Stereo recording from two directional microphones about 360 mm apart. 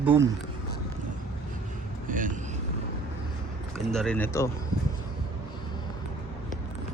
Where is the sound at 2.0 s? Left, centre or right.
Right.